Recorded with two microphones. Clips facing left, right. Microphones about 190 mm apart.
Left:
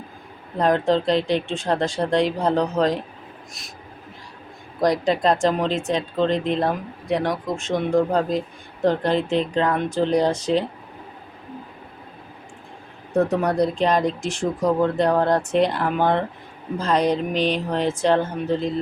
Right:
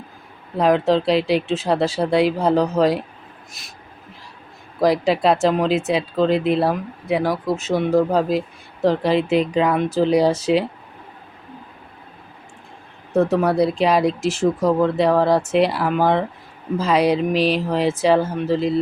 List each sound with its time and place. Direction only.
0.5 s speech: 5° right (ahead or behind)
4.8 s speech: 5° right (ahead or behind)
13.1 s speech: centre (ahead or behind)